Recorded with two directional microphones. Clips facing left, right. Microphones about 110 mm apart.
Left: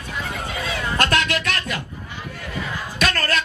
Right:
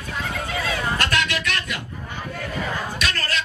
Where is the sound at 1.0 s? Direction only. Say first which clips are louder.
Left 3 dB; 45° left (ahead or behind).